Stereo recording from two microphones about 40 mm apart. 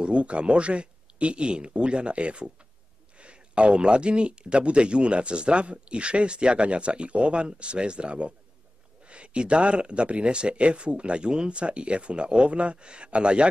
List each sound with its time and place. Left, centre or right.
0.0 s speech: right